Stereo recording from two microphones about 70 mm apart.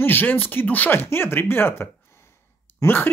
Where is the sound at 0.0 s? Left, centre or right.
Left.